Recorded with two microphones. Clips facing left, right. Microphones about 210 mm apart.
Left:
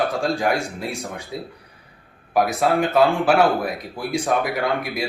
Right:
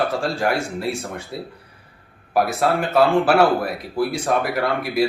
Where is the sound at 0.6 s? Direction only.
Centre (ahead or behind).